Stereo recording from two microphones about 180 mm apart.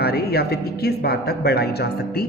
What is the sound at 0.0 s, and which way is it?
A woman's voice, 60° left (ahead or behind).